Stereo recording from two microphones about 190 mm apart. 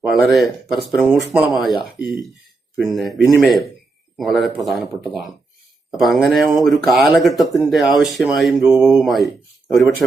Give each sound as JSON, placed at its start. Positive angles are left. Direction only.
{"t": 0.1, "sound": "speech", "side_deg": 0}